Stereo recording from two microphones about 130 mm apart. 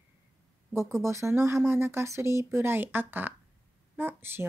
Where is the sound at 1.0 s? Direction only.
20° right (ahead or behind).